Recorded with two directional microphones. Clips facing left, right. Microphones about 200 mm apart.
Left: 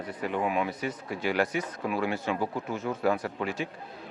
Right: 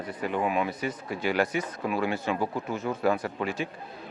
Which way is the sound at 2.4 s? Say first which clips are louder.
Right 1 dB; 25° right (ahead or behind).